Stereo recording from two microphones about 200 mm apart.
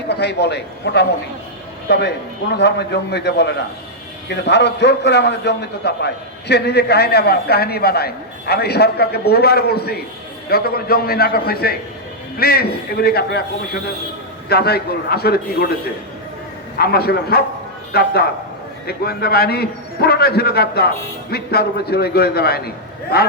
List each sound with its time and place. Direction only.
0.1 s a man's voice: 55° left (ahead or behind)
14.5 s a man's voice: 50° left (ahead or behind)
16.7 s a man's voice: 50° left (ahead or behind)